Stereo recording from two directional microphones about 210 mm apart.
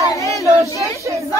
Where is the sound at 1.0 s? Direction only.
15° right (ahead or behind).